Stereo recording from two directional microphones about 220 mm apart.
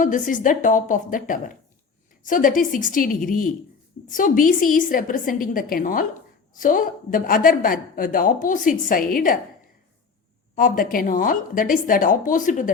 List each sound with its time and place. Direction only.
0.0 s a woman's voice: 35° left (ahead or behind)
10.5 s a woman's voice: 40° left (ahead or behind)